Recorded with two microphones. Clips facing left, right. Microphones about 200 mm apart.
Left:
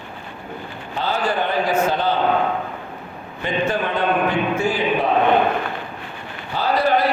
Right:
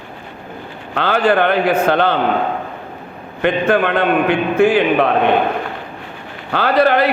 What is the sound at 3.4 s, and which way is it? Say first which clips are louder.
A man's voice: right 7 dB; 65° right (ahead or behind).